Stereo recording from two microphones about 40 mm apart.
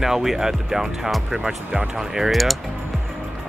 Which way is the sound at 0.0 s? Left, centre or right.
Centre.